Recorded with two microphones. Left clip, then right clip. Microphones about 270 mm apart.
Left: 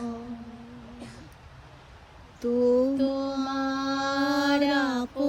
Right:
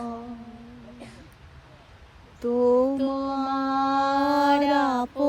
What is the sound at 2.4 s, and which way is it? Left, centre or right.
Mantra, centre.